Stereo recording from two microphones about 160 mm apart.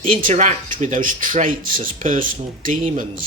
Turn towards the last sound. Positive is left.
turn(degrees=-55)  # may be behind; listen again after turning